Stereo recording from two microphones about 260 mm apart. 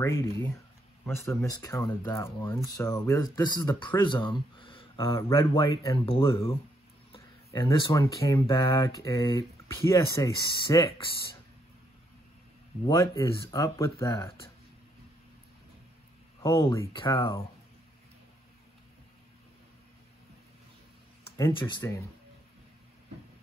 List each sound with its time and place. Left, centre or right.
0.0 s speech: centre
12.8 s speech: centre
16.4 s speech: centre
21.4 s speech: centre